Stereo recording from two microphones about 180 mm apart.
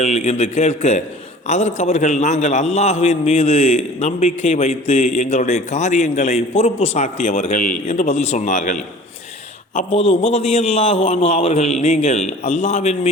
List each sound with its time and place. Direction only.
0.0 s a man's voice: 35° left (ahead or behind)
9.7 s a man's voice: 35° left (ahead or behind)